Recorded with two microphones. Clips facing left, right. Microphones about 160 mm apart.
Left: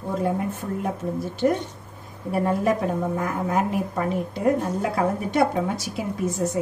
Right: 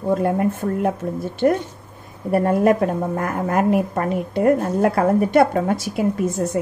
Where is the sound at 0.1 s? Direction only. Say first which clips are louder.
Right 6 dB; 60° right (ahead or behind).